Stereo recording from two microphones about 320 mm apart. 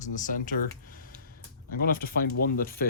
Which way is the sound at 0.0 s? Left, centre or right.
Left.